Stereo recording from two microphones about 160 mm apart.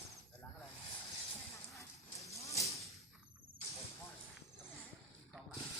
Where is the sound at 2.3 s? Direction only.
20° left (ahead or behind).